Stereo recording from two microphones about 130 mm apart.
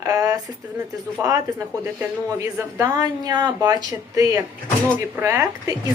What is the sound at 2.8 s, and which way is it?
Speech, 25° right (ahead or behind).